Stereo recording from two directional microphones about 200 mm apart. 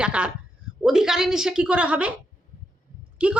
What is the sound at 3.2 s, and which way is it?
Speech, 5° right (ahead or behind).